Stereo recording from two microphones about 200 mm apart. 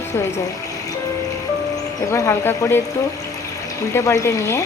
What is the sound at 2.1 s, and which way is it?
Speech, 15° left (ahead or behind).